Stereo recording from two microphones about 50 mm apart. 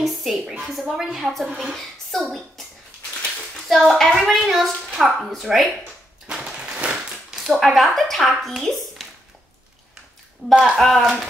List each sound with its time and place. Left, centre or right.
0.0 s a woman's voice: centre
3.6 s a woman's voice: centre
6.3 s a sound: centre
7.3 s a woman's voice: centre
10.4 s speech: centre
10.8 s a woman's voice: centre